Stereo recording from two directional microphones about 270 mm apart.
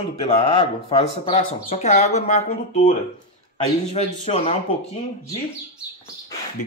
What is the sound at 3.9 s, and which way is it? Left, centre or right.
Speech, left.